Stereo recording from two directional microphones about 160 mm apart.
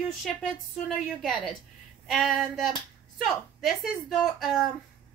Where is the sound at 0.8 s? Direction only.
Centre (ahead or behind).